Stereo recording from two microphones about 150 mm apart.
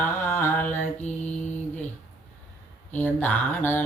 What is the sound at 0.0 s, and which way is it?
Mantra, 15° left (ahead or behind).